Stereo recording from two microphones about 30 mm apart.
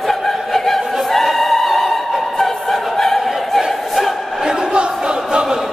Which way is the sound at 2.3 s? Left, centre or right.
Centre.